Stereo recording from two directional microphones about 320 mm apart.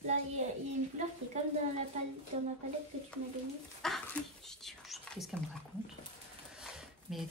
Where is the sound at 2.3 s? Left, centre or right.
Right.